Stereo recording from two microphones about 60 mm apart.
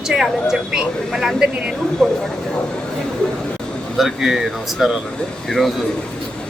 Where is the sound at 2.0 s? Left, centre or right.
Centre.